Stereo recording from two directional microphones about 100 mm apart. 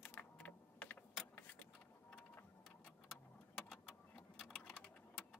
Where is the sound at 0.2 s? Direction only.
15° left (ahead or behind).